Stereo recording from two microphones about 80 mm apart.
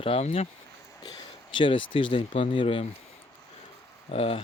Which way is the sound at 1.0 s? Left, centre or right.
Left.